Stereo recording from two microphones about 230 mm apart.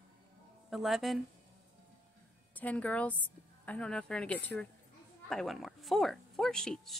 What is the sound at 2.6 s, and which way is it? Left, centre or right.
Speech, centre.